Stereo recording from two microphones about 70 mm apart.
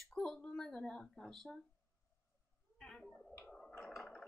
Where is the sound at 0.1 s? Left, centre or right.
Centre.